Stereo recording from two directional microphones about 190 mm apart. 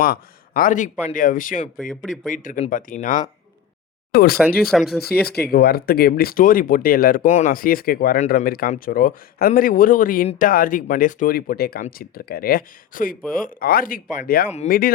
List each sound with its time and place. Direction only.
0.0 s speech: 50° left (ahead or behind)
1.9 s speech: centre (ahead or behind)
2.3 s speech: 45° left (ahead or behind)
4.7 s speech: centre (ahead or behind)
5.3 s speech: 55° left (ahead or behind)